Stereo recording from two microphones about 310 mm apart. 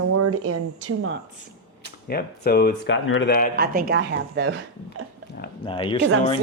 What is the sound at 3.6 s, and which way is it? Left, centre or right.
Speech, right.